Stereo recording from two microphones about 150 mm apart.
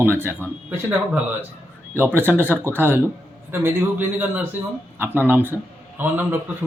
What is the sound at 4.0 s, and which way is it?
Speech, 10° right (ahead or behind).